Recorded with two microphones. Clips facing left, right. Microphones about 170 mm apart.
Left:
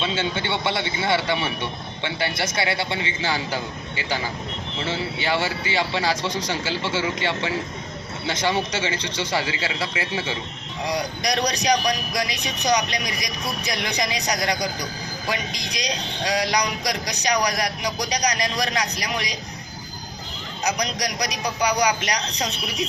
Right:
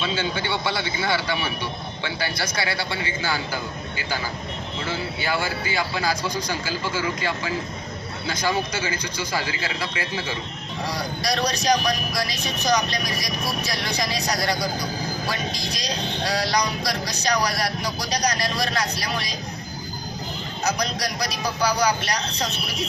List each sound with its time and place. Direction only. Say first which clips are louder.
0.0 s speech: left 1 dB; 25° left (ahead or behind)
4.9 s a man's voice: left 2 dB; 25° left (ahead or behind)
20.7 s a man's voice: even; 15° left (ahead or behind)